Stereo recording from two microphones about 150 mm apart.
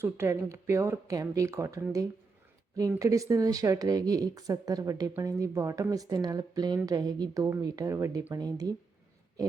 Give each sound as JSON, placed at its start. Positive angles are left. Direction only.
{"t": 0.0, "sound": "speech", "side_deg": -20}